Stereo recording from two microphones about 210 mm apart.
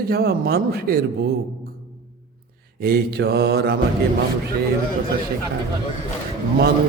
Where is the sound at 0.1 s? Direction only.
50° right (ahead or behind).